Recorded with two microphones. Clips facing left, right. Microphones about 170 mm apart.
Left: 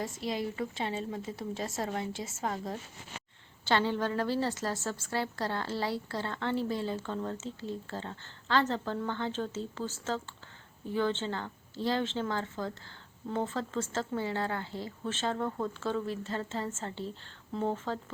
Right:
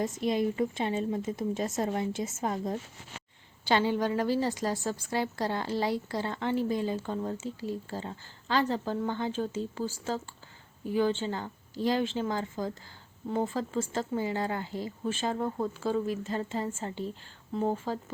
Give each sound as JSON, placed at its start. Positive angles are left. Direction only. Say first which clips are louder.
{"t": 0.0, "sound": "a woman's voice", "louder": "right 6 dB", "side_deg": -20}